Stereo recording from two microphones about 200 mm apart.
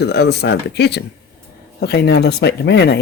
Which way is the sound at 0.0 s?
55° left (ahead or behind).